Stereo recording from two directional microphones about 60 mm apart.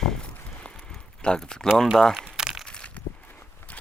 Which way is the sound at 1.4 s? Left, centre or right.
Centre.